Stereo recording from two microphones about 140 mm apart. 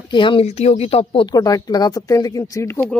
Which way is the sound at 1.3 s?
25° left (ahead or behind).